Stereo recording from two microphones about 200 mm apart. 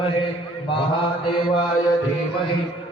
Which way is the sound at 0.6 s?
25° left (ahead or behind).